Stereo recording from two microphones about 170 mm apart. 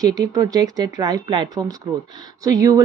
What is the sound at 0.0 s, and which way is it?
A woman's voice, 20° right (ahead or behind).